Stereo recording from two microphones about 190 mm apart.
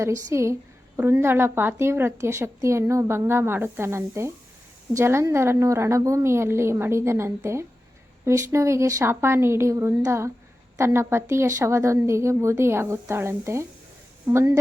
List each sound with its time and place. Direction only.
0.0 s a woman's voice: 15° right (ahead or behind)